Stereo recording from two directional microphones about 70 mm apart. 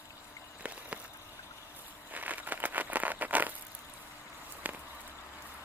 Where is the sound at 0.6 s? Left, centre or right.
Right.